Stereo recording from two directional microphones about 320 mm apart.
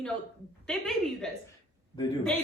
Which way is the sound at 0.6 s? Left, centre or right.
Centre.